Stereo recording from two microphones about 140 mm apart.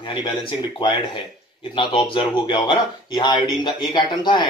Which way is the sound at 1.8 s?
35° left (ahead or behind).